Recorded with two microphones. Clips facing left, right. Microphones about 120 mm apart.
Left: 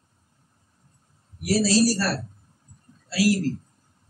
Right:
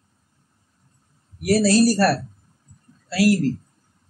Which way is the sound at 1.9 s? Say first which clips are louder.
Right 7 dB; 55° right (ahead or behind).